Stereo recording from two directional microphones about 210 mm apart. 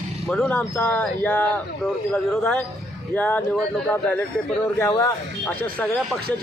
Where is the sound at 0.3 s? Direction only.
5° left (ahead or behind).